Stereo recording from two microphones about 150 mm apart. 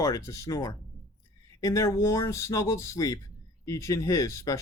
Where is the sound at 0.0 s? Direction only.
20° left (ahead or behind).